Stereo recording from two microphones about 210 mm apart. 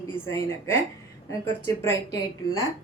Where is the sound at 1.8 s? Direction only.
15° left (ahead or behind).